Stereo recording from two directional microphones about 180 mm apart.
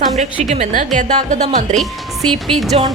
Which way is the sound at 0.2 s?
40° right (ahead or behind).